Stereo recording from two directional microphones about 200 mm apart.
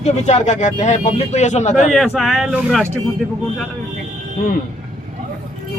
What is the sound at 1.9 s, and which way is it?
Speech, centre (ahead or behind).